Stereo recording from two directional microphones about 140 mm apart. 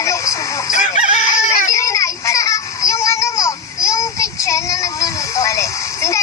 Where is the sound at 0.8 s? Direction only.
60° left (ahead or behind).